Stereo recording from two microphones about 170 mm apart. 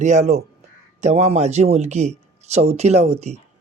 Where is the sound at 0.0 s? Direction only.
45° right (ahead or behind).